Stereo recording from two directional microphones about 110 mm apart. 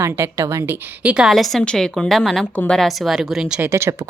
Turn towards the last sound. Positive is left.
turn(degrees=-25)  # may be behind; listen again after turning